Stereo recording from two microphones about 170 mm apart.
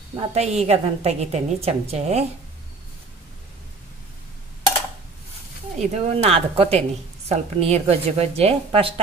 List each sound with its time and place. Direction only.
0.1 s a woman's voice: 35° right (ahead or behind)
5.8 s a woman's voice: 40° right (ahead or behind)